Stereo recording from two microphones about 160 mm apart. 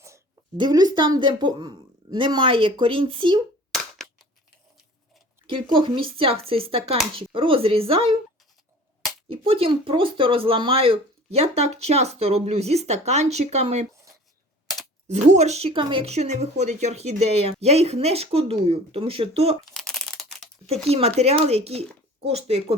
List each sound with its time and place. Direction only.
0.5 s a woman's voice: 25° right (ahead or behind)
3.7 s clapping: 5° left (ahead or behind)
5.5 s speech: 30° right (ahead or behind)
9.3 s speech: 35° right (ahead or behind)
15.0 s speech: 45° right (ahead or behind)
19.7 s a sound: 5° left (ahead or behind)
20.8 s speech: 40° right (ahead or behind)